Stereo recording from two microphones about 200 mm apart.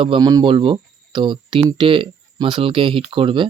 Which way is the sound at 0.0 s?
25° right (ahead or behind).